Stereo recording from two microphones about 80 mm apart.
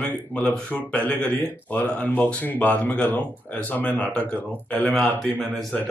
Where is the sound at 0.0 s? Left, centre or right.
Centre.